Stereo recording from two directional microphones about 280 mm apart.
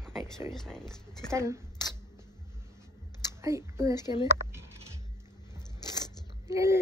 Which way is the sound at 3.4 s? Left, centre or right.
Centre.